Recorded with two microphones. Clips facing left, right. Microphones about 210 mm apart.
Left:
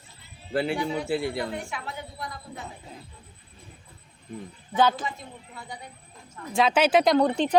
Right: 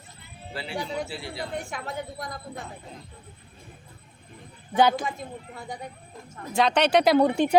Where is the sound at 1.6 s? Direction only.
45° right (ahead or behind).